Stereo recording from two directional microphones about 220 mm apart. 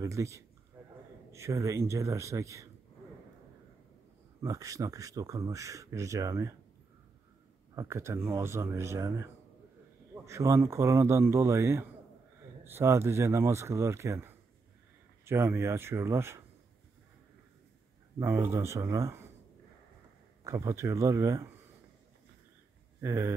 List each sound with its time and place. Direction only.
0.0 s speech: 15° right (ahead or behind)
0.8 s a sound: 10° right (ahead or behind)
1.3 s speech: 15° right (ahead or behind)
4.4 s speech: 15° right (ahead or behind)
7.7 s speech: 15° right (ahead or behind)
18.2 s speech: 10° right (ahead or behind)
20.4 s speech: 15° right (ahead or behind)
22.9 s speech: 10° right (ahead or behind)